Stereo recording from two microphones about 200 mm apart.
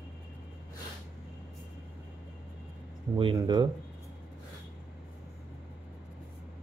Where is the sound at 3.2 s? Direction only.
25° right (ahead or behind).